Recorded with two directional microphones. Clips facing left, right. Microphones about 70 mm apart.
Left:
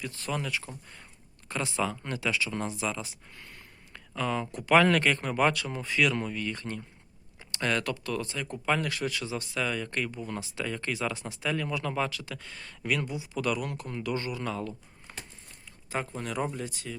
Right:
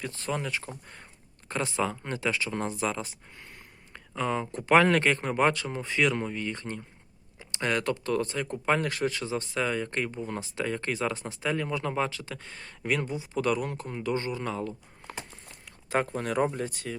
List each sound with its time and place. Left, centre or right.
0.0 s speech: right
3.3 s speech: right
8.0 s speech: right
15.6 s speech: right